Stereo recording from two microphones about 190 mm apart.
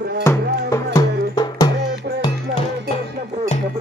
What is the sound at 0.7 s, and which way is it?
Music, 15° left (ahead or behind).